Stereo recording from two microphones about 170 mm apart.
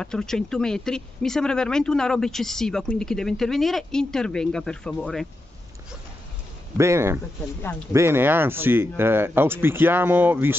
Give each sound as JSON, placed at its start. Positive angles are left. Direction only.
{"t": 0.0, "sound": "speech", "side_deg": 5}
{"t": 6.8, "sound": "speech", "side_deg": -15}